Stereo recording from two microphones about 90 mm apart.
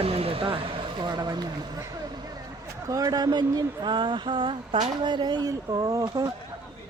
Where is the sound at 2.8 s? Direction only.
40° right (ahead or behind).